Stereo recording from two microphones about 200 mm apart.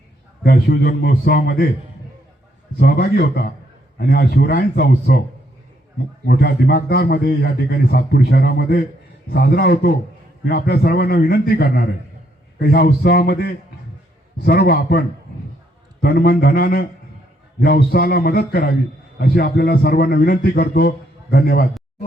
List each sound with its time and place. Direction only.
0.4 s a man's voice: 50° left (ahead or behind)
2.7 s a man's voice: 50° left (ahead or behind)
6.2 s a man's voice: 50° left (ahead or behind)